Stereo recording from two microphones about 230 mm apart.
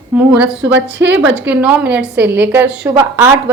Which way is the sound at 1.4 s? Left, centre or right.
Centre.